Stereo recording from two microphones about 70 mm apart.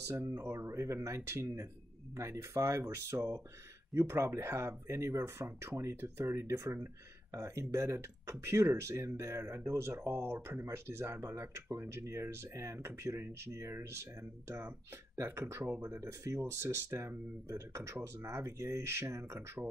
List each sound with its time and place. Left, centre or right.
0.1 s speech: right
3.9 s speech: right
15.1 s speech: right